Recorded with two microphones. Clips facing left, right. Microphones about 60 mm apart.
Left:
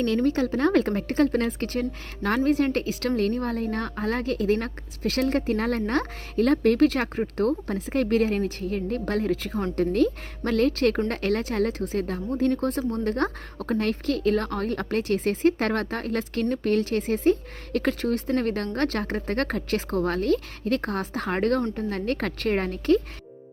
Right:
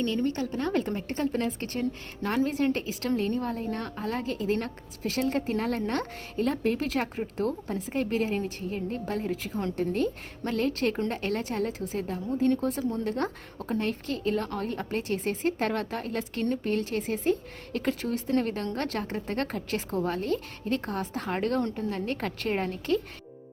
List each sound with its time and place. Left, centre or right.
0.3 s a woman's voice: left